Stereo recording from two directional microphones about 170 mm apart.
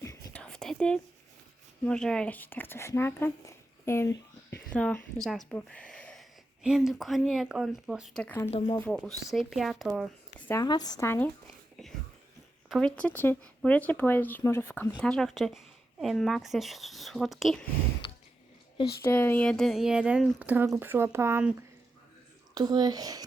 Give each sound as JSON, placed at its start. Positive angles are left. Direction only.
{"t": 0.0, "sound": "whispering", "side_deg": 20}
{"t": 0.3, "sound": "whispering", "side_deg": 5}
{"t": 1.8, "sound": "speech", "side_deg": 5}
{"t": 8.4, "sound": "speech", "side_deg": 35}
{"t": 8.8, "sound": "speech", "side_deg": 5}
{"t": 10.5, "sound": "a woman's voice", "side_deg": 20}
{"t": 11.4, "sound": "a sound", "side_deg": 0}
{"t": 12.6, "sound": "speech", "side_deg": 0}
{"t": 19.0, "sound": "speech", "side_deg": 10}
{"t": 22.5, "sound": "a woman's voice", "side_deg": -25}